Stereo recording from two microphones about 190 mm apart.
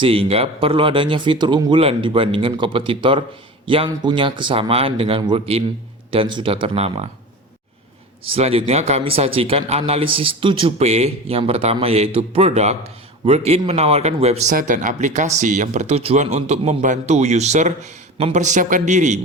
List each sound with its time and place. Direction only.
0.0 s speech: 30° right (ahead or behind)
8.3 s speech: 30° right (ahead or behind)